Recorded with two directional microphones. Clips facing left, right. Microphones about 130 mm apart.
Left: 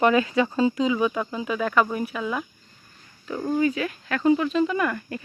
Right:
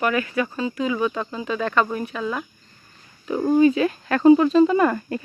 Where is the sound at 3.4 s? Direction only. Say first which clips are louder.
Right 7 dB; 30° right (ahead or behind).